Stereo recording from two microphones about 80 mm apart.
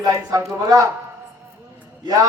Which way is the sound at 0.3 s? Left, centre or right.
Right.